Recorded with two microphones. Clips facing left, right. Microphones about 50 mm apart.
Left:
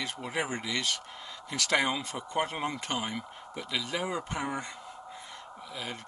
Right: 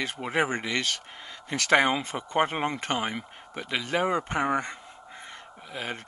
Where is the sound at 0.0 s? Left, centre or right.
Right.